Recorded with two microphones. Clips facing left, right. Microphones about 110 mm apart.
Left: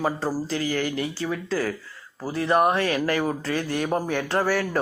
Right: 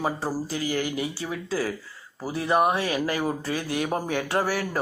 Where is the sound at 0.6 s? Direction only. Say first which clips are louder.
Even; 50° left (ahead or behind).